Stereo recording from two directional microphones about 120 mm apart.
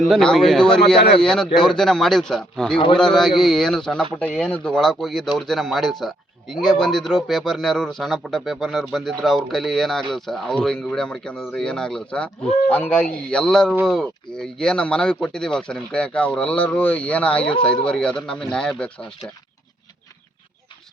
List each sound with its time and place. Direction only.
0.1 s speech: centre (ahead or behind)
2.7 s a man's voice: 45° left (ahead or behind)
3.2 s speech: centre (ahead or behind)